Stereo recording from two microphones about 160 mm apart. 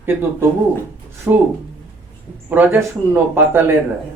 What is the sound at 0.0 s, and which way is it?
Speech, 15° right (ahead or behind).